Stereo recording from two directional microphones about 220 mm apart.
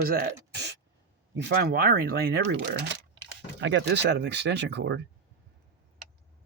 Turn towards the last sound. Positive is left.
turn(degrees=-50)  # may be behind; listen again after turning